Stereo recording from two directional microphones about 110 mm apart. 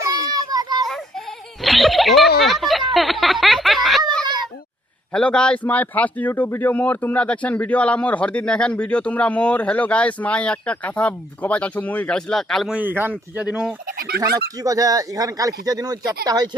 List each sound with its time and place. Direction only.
0.0 s children playing: 35° right (ahead or behind)
0.9 s a sound: 5° left (ahead or behind)
1.6 s speech: centre (ahead or behind)
5.1 s speech: 10° left (ahead or behind)
12.7 s speech: 15° right (ahead or behind)
14.2 s speech: 30° right (ahead or behind)